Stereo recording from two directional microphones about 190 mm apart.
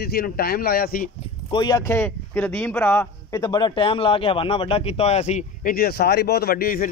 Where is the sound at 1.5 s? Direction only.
20° left (ahead or behind).